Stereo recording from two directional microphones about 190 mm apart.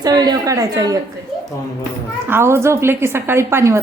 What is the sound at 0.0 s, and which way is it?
Speech, 20° right (ahead or behind).